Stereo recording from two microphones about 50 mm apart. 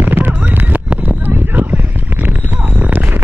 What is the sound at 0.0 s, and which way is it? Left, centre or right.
Clip-clop, right.